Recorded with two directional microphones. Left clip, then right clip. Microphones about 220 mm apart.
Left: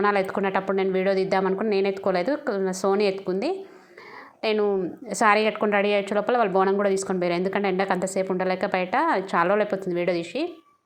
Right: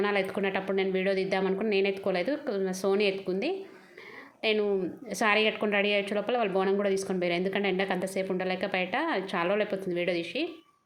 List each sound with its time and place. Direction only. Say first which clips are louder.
0.0 s a woman's voice: left 6 dB; 20° left (ahead or behind)